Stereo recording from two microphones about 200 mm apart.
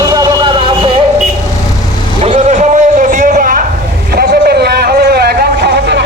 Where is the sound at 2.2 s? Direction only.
35° right (ahead or behind); by 6.0 s 55° right (ahead or behind).